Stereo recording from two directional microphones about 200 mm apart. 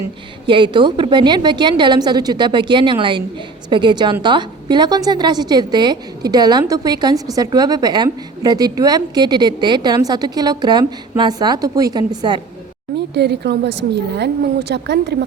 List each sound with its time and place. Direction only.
0.4 s a woman's voice: 25° right (ahead or behind)
13.1 s a woman's voice: 55° right (ahead or behind)